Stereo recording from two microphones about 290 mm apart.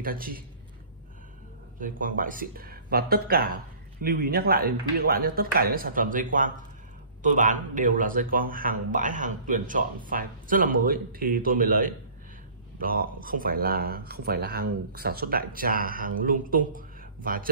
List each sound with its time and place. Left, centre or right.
0.0 s speech: right
1.8 s speech: right